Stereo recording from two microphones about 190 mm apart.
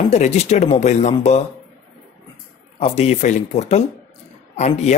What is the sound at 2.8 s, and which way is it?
Speech, 35° left (ahead or behind).